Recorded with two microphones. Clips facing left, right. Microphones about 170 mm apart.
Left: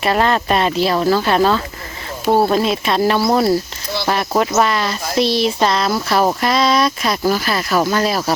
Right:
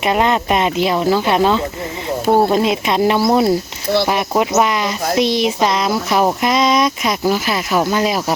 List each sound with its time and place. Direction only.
0.0 s speech: 15° right (ahead or behind)